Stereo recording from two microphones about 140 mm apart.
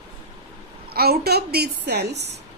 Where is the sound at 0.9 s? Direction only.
90° right.